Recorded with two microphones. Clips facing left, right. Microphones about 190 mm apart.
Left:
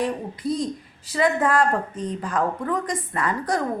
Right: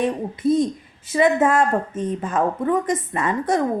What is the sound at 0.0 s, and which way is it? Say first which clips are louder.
A woman's voice: right 5 dB; 20° right (ahead or behind).